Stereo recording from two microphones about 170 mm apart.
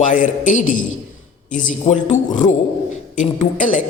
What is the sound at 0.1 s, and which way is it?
A man's voice, 50° left (ahead or behind).